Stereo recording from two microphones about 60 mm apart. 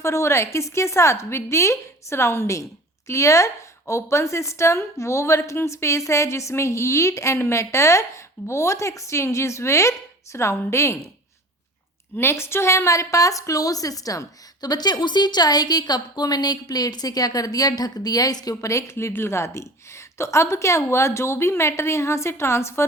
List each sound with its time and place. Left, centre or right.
0.0 s a woman's voice: left
12.1 s a woman's voice: left